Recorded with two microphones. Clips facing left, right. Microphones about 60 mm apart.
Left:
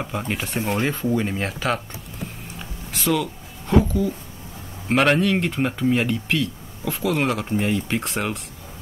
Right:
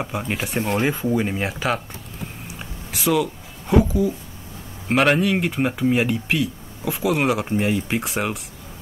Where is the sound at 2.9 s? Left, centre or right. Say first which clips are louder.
Right 2 dB; centre.